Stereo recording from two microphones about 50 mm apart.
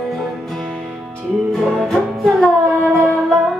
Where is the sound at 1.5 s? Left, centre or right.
Centre.